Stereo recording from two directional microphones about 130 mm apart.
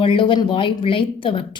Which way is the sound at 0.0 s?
40° left (ahead or behind).